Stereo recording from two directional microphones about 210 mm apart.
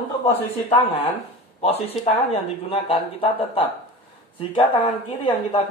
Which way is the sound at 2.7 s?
25° left (ahead or behind).